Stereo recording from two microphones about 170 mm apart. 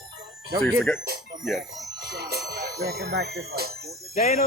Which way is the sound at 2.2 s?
70° right (ahead or behind).